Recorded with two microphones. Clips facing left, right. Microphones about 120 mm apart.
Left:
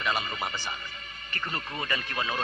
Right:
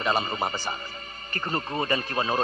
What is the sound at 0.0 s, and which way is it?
Speech, 35° right (ahead or behind).